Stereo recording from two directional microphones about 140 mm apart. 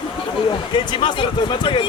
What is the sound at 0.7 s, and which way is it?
Speech, 35° left (ahead or behind).